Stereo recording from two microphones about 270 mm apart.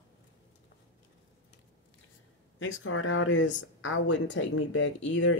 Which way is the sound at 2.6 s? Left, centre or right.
Left.